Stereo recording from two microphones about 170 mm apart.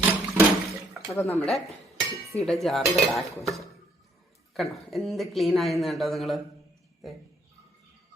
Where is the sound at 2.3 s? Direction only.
Centre (ahead or behind).